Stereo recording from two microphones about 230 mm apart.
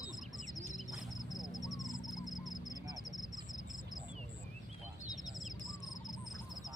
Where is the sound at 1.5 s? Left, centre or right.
Centre.